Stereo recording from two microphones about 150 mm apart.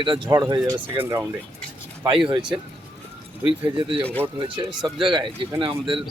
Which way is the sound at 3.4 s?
35° right (ahead or behind).